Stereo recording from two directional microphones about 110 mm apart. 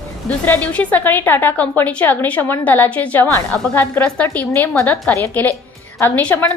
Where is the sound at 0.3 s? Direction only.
15° left (ahead or behind).